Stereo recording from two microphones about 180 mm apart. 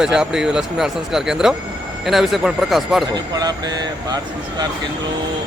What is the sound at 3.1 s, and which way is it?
Speech, 20° right (ahead or behind).